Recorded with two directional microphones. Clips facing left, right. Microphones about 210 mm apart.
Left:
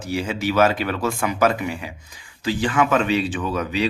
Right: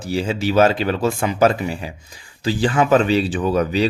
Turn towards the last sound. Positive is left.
turn(degrees=-35)  # may be behind; listen again after turning